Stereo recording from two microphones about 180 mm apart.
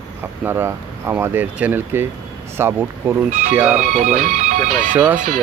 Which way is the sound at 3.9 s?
45° right (ahead or behind).